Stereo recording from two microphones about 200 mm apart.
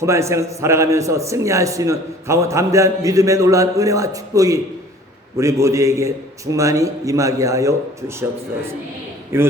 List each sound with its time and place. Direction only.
0.0 s a man's voice: 15° right (ahead or behind)
9.3 s a man's voice: 10° right (ahead or behind)